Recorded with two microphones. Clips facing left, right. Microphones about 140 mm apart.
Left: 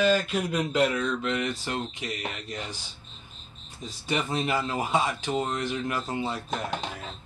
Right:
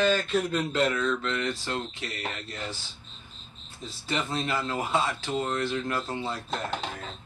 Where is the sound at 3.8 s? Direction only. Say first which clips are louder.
Left 2 dB; 15° left (ahead or behind).